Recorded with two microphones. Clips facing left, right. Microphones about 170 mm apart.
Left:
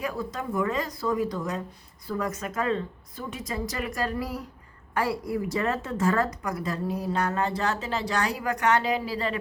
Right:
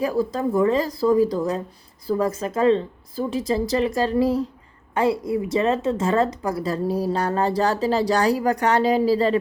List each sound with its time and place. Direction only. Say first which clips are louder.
0.0 s a woman's voice: right 9 dB; 35° right (ahead or behind)